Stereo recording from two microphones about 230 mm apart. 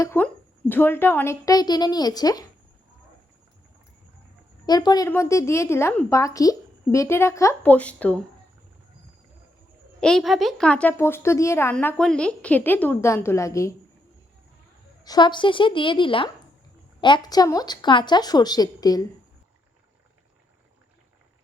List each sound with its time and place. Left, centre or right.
0.0 s speech: centre
4.6 s speech: centre
10.0 s speech: centre
15.0 s a woman's voice: centre